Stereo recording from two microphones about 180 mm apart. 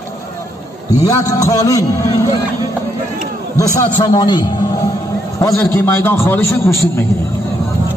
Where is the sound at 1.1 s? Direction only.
15° left (ahead or behind).